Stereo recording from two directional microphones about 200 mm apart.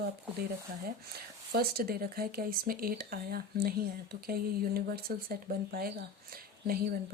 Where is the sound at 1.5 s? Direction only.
50° right (ahead or behind).